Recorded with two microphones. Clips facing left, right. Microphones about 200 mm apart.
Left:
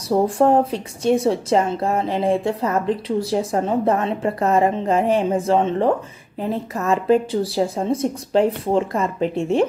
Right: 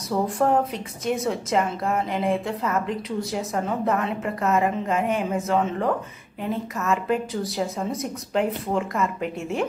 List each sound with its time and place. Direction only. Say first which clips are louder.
0.1 s speech: left 6 dB; 30° left (ahead or behind)